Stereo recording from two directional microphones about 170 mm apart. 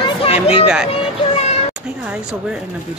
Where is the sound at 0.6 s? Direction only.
5° right (ahead or behind).